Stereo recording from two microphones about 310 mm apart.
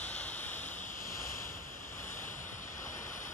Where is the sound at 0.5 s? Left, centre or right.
Left.